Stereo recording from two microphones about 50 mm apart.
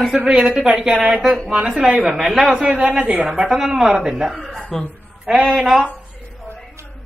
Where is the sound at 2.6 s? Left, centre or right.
Centre.